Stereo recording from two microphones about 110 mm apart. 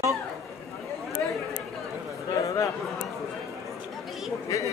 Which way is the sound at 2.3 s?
30° left (ahead or behind).